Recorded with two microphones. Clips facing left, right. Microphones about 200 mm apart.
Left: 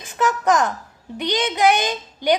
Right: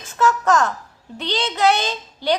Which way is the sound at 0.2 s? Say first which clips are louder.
Right 1 dB; 15° left (ahead or behind).